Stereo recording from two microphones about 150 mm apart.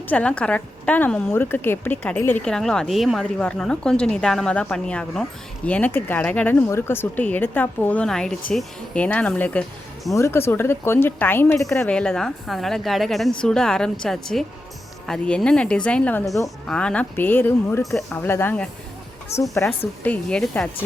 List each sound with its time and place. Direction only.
0.1 s a woman's voice: 10° left (ahead or behind)
10.2 s a woman's voice: 15° left (ahead or behind)
20.1 s speech: 5° left (ahead or behind)